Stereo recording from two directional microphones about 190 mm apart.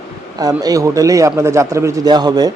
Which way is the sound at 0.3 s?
20° right (ahead or behind).